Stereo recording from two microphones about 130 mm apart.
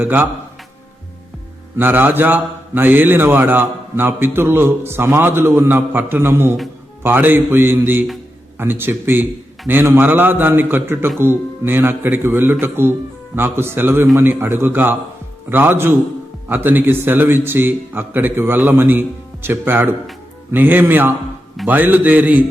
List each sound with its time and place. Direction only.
0.0 s a man's voice: 15° right (ahead or behind)
1.8 s a man's voice: 15° right (ahead or behind)